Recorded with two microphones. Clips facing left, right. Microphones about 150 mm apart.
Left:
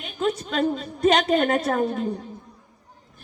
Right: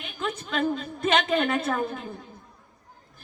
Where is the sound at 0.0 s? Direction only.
40° left (ahead or behind).